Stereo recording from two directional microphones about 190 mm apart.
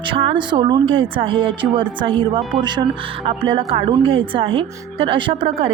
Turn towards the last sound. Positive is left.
turn(degrees=-25)  # may be behind; listen again after turning